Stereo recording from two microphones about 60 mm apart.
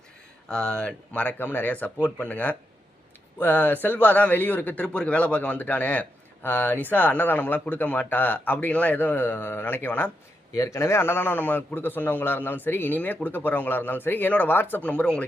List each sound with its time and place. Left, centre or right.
0.4 s speech: centre
1.4 s a man's voice: left
10.5 s a man's voice: left; by 15.3 s centre